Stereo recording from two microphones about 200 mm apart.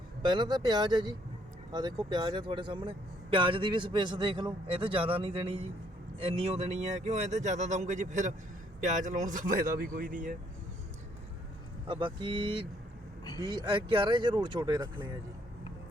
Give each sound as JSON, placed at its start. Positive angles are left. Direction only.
{"t": 0.2, "sound": "speech", "side_deg": -25}
{"t": 11.9, "sound": "speech", "side_deg": -25}